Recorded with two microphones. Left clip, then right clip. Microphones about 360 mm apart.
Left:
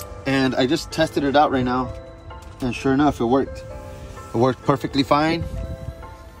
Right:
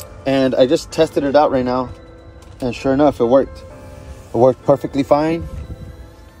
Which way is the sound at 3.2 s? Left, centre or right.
Centre.